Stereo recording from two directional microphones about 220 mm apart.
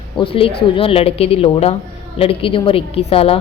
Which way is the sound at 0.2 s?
25° left (ahead or behind).